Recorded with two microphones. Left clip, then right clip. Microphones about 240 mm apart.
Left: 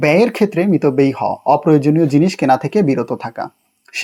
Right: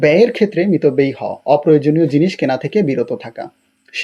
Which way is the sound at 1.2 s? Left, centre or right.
Left.